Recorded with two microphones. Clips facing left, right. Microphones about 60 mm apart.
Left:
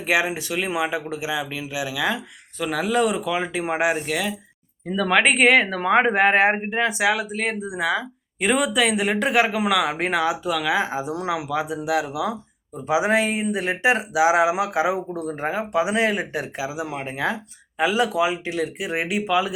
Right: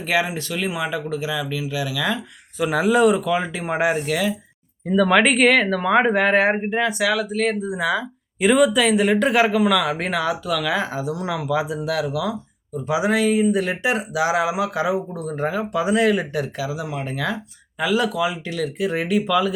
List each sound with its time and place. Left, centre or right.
0.0 s speech: centre
2.6 s speech: centre
9.6 s speech: centre
10.9 s speech: left
11.3 s speech: centre